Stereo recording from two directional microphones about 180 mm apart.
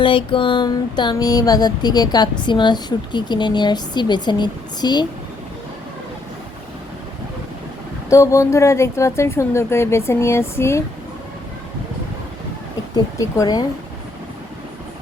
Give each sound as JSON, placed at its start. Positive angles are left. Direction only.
{"t": 0.0, "sound": "speech", "side_deg": 30}
{"t": 8.1, "sound": "speech", "side_deg": 15}
{"t": 13.1, "sound": "speech", "side_deg": 20}